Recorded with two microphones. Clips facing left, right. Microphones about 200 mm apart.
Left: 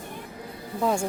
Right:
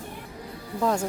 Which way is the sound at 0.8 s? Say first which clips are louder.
Even; 10° left (ahead or behind).